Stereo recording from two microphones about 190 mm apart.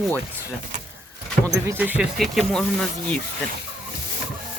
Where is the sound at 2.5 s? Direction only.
5° left (ahead or behind).